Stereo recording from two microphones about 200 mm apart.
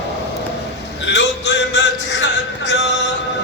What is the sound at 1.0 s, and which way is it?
Music, 60° left (ahead or behind).